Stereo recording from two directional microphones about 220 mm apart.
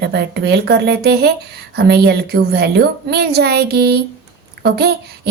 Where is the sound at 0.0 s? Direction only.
50° right (ahead or behind).